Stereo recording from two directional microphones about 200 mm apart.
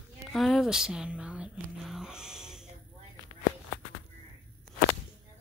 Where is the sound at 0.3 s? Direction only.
Centre (ahead or behind).